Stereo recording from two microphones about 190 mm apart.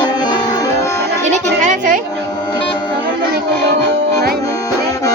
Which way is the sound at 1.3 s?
40° right (ahead or behind).